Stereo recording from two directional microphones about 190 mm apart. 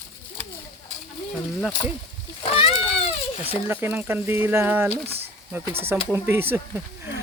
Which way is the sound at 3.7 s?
10° right (ahead or behind).